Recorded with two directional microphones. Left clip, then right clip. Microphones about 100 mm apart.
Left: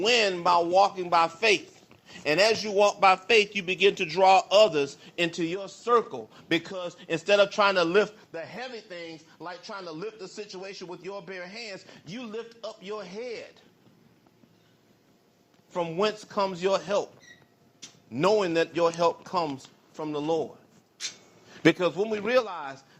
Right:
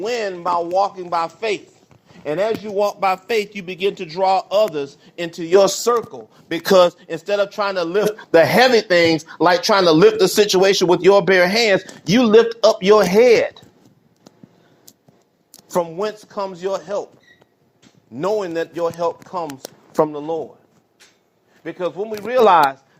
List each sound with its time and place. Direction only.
0.0 s a man's voice: 15° right (ahead or behind)
15.7 s a man's voice: 25° right (ahead or behind)
18.1 s a man's voice: 25° right (ahead or behind)